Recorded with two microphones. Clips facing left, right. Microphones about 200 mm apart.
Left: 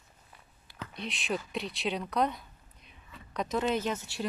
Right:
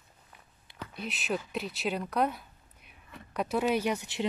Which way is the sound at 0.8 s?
5° right (ahead or behind).